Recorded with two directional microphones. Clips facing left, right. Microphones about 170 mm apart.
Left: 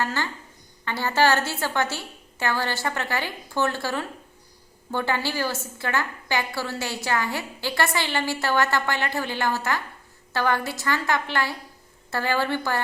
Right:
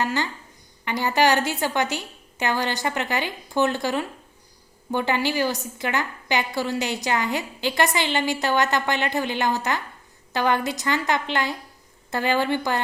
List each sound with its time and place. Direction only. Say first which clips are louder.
0.0 s a woman's voice: right 2 dB; 15° right (ahead or behind)